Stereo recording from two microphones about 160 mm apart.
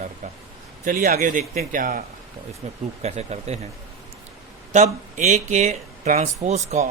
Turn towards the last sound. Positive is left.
turn(degrees=-45)  # may be behind; listen again after turning